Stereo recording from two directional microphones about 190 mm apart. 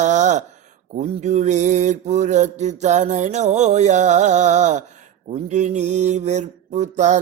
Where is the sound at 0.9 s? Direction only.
35° right (ahead or behind).